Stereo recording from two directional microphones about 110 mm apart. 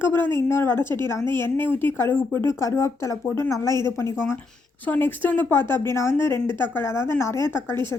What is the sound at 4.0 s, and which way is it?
Speech, 25° left (ahead or behind).